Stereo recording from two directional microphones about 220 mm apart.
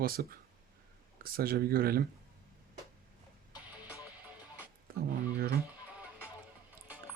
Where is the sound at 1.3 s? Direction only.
40° right (ahead or behind).